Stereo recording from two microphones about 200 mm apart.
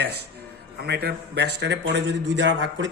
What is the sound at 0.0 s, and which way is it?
Speech, 55° right (ahead or behind).